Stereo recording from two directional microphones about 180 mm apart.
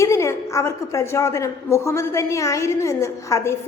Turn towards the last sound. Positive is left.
turn(degrees=15)  # may be behind; listen again after turning